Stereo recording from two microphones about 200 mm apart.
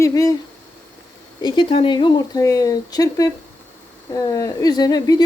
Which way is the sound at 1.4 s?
25° left (ahead or behind).